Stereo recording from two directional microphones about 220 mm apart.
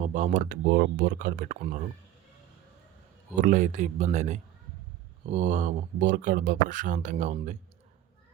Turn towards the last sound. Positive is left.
turn(degrees=-35)  # may be behind; listen again after turning